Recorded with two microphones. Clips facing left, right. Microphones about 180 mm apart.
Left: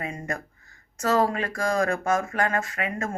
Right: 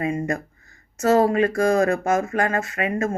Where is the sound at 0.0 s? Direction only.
25° right (ahead or behind).